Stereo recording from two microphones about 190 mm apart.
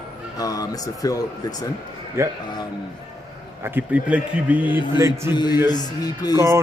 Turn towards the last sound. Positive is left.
turn(degrees=-15)  # may be behind; listen again after turning